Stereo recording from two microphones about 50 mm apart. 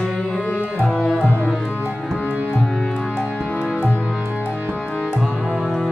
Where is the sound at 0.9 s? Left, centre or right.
Centre.